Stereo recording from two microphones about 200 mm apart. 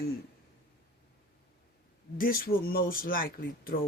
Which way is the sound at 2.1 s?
45° left (ahead or behind).